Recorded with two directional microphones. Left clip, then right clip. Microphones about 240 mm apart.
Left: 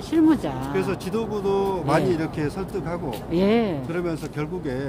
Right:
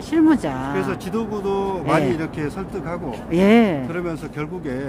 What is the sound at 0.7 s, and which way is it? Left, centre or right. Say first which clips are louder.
Speech: right 1 dB; centre.